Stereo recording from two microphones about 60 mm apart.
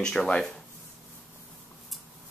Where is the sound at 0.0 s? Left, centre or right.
Centre.